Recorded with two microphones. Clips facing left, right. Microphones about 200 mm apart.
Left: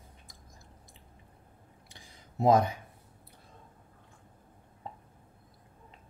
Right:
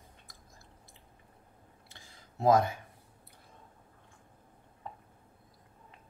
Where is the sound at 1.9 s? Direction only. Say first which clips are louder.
Left 5 dB; 20° left (ahead or behind).